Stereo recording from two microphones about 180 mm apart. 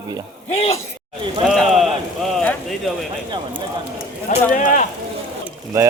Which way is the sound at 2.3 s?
Centre (ahead or behind).